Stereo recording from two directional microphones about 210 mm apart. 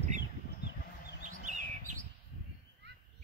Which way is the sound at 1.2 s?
35° right (ahead or behind).